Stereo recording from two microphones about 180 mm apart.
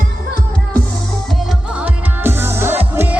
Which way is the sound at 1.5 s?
5° right (ahead or behind).